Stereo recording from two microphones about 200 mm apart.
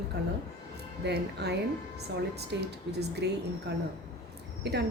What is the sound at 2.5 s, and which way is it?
Speech, 60° right (ahead or behind).